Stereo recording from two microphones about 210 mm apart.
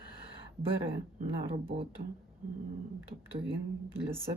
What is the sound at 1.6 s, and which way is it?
Speech, 25° right (ahead or behind).